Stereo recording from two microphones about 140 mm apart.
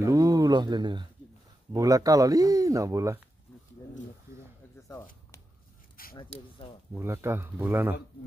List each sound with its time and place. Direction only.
0.0 s speech: 25° right (ahead or behind)
6.1 s speech: 40° left (ahead or behind)
6.9 s speech: 15° right (ahead or behind)